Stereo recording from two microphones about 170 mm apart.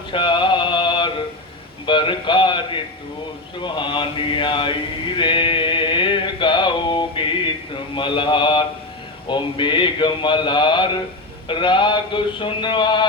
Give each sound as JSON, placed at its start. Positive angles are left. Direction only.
{"t": 0.1, "sound": "mantra", "side_deg": 30}